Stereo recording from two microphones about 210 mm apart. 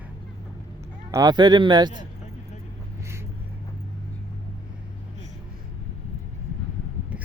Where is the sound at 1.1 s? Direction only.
20° right (ahead or behind).